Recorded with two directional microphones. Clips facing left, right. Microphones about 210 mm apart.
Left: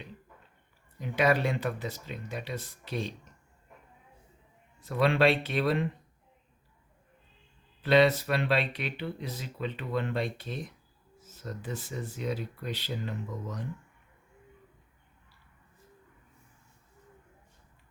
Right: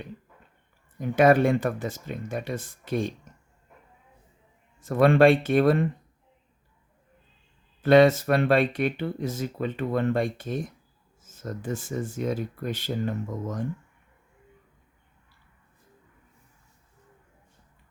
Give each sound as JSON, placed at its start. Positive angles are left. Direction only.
{"t": 0.9, "sound": "speech", "side_deg": -50}
{"t": 4.8, "sound": "speech", "side_deg": -50}
{"t": 7.8, "sound": "speech", "side_deg": -50}